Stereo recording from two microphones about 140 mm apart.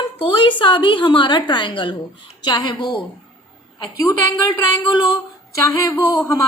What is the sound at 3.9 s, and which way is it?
Speech, 20° left (ahead or behind).